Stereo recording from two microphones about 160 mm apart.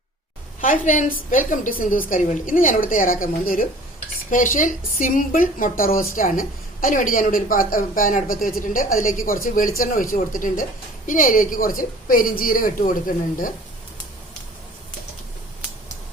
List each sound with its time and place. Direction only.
0.6 s a woman's voice: 55° left (ahead or behind)